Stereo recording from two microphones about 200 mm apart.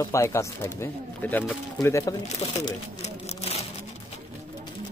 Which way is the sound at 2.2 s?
30° left (ahead or behind).